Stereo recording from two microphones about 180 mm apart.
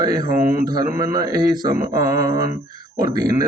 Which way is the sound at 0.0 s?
20° right (ahead or behind).